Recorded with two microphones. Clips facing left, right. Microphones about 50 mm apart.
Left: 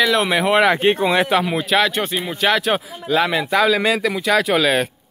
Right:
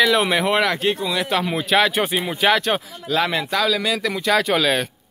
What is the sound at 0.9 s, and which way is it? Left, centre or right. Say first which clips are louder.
Speech: left 6 dB; left.